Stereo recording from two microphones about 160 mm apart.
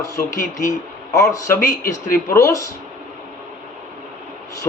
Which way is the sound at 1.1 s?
20° left (ahead or behind).